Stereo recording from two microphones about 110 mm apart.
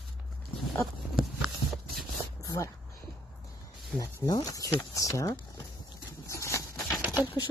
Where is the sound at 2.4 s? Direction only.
35° left (ahead or behind).